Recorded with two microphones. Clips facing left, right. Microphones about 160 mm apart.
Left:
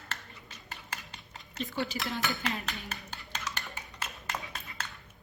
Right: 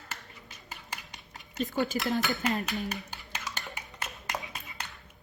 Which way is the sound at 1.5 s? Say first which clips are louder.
Right 5 dB; 45° right (ahead or behind).